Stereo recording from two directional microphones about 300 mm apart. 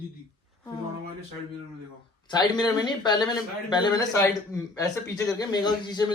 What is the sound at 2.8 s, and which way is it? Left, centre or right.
Speech, centre.